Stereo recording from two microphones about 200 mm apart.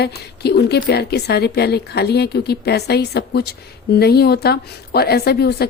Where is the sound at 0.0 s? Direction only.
55° left (ahead or behind).